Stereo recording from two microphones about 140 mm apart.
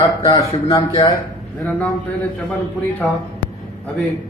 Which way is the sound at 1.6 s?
10° left (ahead or behind).